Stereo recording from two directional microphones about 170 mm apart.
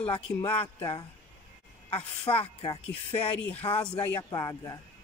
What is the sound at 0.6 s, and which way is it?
Speech, 25° left (ahead or behind).